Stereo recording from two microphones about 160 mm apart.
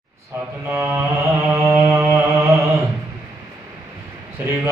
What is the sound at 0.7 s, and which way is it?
Mantra, 15° right (ahead or behind).